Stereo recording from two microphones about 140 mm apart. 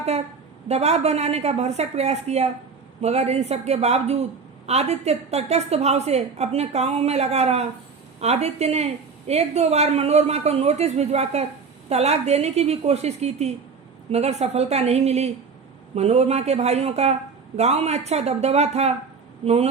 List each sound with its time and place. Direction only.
0.7 s a woman's voice: 50° right (ahead or behind)